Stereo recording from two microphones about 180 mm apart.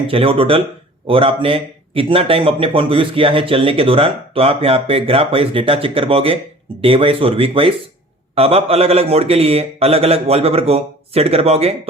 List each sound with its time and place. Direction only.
0.1 s a man's voice: 30° right (ahead or behind)